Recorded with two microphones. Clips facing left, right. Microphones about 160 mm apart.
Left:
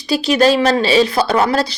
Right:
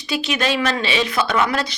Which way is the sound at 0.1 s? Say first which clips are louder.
Left 9 dB; 35° left (ahead or behind).